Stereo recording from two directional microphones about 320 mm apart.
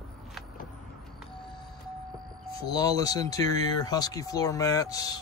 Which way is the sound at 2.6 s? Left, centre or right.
Centre.